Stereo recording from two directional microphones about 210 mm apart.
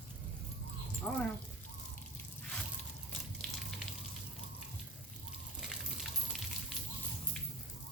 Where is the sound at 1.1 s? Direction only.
10° left (ahead or behind).